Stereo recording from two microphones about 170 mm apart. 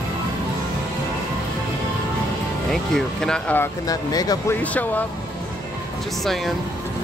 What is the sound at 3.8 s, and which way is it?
Speech, 20° left (ahead or behind).